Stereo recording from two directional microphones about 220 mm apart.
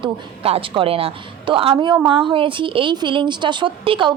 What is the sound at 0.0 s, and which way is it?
A woman's voice, 25° right (ahead or behind).